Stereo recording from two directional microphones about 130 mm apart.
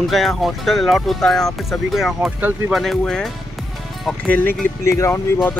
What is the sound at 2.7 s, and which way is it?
Speech, centre (ahead or behind).